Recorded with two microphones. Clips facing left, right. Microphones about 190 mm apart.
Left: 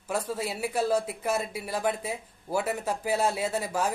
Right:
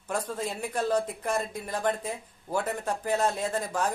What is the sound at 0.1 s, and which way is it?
Speech, 10° left (ahead or behind).